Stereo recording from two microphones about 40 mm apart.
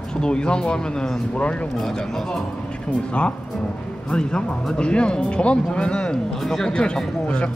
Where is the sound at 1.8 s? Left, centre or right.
Centre.